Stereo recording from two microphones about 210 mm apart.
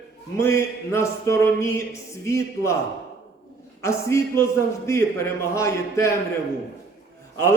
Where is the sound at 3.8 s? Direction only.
15° left (ahead or behind).